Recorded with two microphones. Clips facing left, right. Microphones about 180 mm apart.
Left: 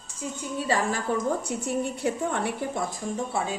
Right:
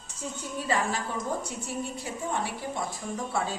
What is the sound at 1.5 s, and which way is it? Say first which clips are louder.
A woman's voice: left 6 dB; 60° left (ahead or behind).